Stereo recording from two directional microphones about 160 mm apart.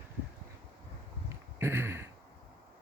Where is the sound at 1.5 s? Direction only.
15° right (ahead or behind).